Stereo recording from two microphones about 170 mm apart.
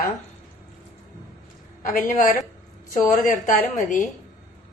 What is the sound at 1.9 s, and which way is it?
A woman's voice, 50° left (ahead or behind).